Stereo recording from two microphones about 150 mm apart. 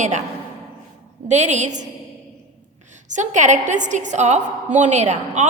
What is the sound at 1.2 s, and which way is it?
Speech, 50° right (ahead or behind).